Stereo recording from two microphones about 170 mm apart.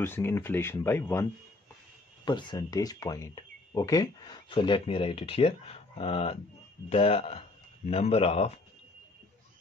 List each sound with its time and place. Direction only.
0.0 s speech: 15° left (ahead or behind)
2.2 s speech: 25° left (ahead or behind)